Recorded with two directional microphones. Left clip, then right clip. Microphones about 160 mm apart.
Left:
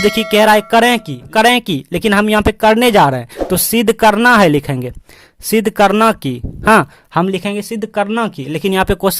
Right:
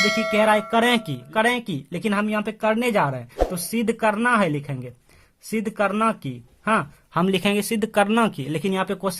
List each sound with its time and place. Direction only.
0.0 s music: centre (ahead or behind)
0.3 s speech: 50° left (ahead or behind); by 1.2 s 30° left (ahead or behind)
1.3 s speech: 45° left (ahead or behind)
7.3 s speech: 20° left (ahead or behind); by 9.1 s 45° left (ahead or behind)